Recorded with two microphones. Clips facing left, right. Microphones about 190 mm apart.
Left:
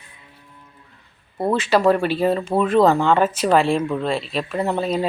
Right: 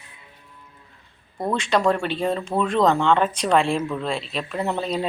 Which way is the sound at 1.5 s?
5° left (ahead or behind).